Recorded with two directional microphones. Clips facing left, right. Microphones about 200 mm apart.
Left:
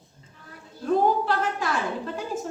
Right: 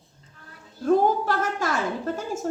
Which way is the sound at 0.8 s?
45° right (ahead or behind).